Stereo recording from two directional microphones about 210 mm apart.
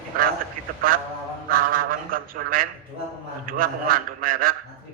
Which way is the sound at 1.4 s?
45° right (ahead or behind).